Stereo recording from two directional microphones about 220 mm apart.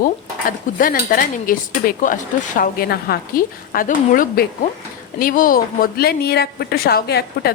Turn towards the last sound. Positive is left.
turn(degrees=45)  # may be behind; listen again after turning